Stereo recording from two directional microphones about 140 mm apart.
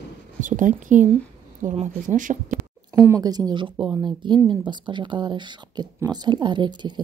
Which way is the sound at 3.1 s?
25° right (ahead or behind).